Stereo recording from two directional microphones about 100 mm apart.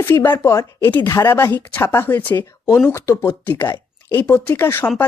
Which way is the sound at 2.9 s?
30° left (ahead or behind).